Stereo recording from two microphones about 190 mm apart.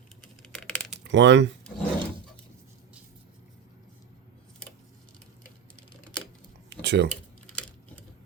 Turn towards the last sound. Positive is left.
turn(degrees=-60)  # may be behind; listen again after turning